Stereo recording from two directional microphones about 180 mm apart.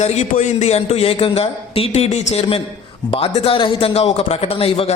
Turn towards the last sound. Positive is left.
turn(degrees=35)  # may be behind; listen again after turning